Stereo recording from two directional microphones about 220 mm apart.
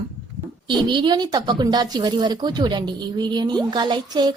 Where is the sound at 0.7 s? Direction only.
20° right (ahead or behind).